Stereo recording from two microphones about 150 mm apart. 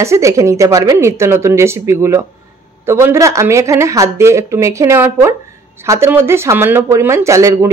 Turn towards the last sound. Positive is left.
turn(degrees=-20)  # may be behind; listen again after turning